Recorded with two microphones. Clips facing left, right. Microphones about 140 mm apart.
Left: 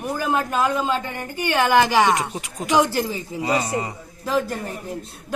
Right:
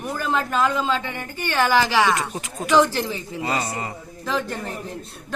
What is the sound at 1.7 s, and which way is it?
Speech, 55° left (ahead or behind).